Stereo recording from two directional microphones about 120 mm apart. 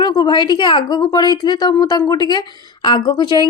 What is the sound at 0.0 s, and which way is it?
A woman's voice, 35° left (ahead or behind).